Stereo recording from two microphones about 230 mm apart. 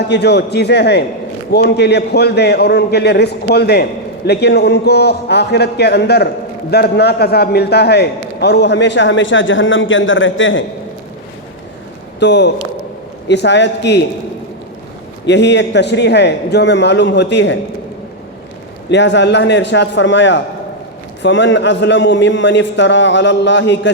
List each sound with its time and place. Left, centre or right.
0.1 s a man's voice: left
12.2 s a man's voice: left
15.3 s a man's voice: left
18.9 s a man's voice: left